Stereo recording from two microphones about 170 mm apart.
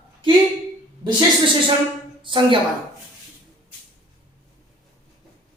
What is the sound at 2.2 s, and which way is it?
Speech, 30° right (ahead or behind).